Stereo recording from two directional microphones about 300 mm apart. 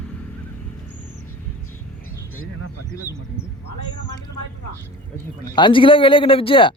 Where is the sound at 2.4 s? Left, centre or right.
Left.